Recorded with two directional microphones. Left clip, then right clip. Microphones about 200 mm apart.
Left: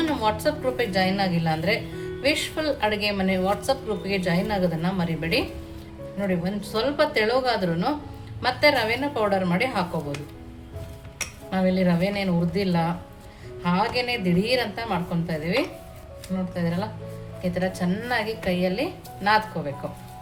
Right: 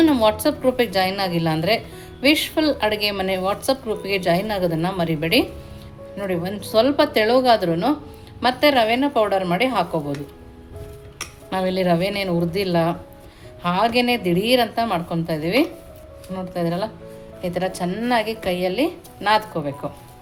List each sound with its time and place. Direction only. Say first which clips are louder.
0.0 s a woman's voice: right 6 dB; 40° right (ahead or behind)
11.5 s a woman's voice: right 4 dB; 40° right (ahead or behind)